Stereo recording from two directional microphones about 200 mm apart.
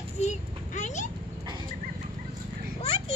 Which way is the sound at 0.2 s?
35° left (ahead or behind).